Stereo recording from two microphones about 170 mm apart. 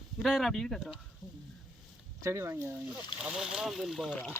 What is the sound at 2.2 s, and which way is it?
Speech, 15° right (ahead or behind).